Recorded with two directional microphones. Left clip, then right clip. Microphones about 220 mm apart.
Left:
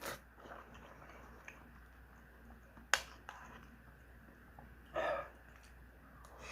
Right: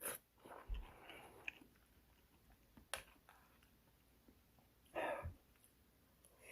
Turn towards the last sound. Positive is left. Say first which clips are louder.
# left 6 dB
turn(degrees=-40)  # may be behind; listen again after turning